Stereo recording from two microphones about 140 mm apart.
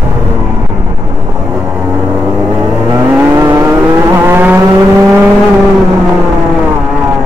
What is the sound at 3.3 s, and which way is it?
Vehicle, 20° right (ahead or behind).